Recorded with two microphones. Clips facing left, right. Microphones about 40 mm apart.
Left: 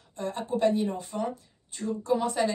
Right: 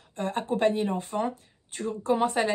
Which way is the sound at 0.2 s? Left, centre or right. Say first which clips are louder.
Right 1 dB; right.